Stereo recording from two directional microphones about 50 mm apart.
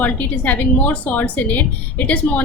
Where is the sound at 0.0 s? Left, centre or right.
Left.